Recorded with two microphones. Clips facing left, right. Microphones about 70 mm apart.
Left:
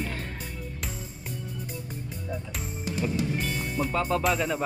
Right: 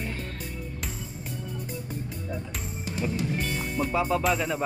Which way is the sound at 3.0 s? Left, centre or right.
Centre.